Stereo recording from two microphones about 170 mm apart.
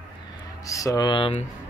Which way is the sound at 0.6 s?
20° left (ahead or behind).